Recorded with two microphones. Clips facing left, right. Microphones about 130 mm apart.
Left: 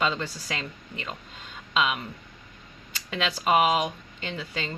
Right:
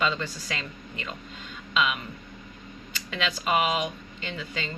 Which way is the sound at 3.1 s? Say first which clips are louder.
Left 3 dB; 35° left (ahead or behind).